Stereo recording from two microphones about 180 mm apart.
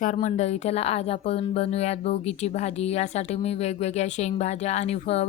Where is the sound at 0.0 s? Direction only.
45° left (ahead or behind).